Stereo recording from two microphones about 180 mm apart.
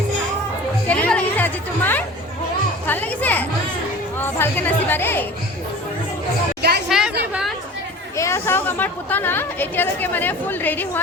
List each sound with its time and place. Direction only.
0.9 s music: 10° left (ahead or behind)
2.8 s children playing: 10° left (ahead or behind)
4.2 s a woman's voice: 10° left (ahead or behind)
6.6 s a sound: 65° right (ahead or behind)
6.8 s a sound: 5° right (ahead or behind)
8.1 s a woman's voice: 15° left (ahead or behind)